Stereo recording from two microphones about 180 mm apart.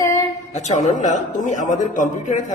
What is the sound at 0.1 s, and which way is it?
A man's voice, 40° left (ahead or behind).